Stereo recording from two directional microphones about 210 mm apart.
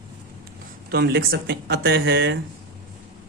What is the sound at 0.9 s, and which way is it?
Speech, 50° right (ahead or behind).